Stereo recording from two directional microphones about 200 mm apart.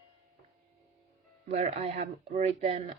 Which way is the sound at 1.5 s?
30° right (ahead or behind).